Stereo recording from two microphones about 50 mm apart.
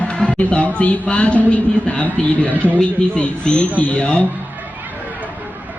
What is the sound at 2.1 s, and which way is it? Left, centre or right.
Speech, left.